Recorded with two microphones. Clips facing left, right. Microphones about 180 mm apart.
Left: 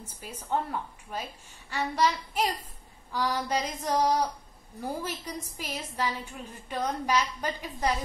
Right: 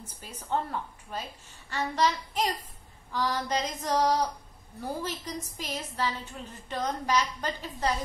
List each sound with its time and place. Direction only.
0.0 s a woman's voice: 10° left (ahead or behind)